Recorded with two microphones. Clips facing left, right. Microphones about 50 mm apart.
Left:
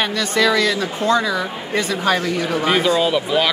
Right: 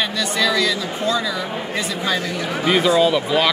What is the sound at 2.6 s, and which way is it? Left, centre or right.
Speech, centre.